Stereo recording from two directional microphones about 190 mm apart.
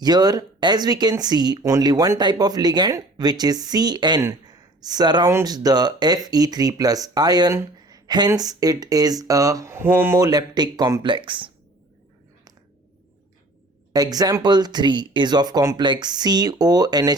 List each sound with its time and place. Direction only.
0.0 s speech: 20° right (ahead or behind)
13.9 s speech: 20° right (ahead or behind)